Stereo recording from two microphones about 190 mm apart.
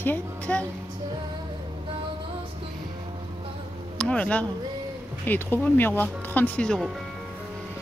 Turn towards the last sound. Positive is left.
turn(degrees=0)  # may be behind; listen again after turning